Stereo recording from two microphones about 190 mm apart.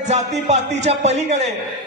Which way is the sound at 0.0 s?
35° right (ahead or behind).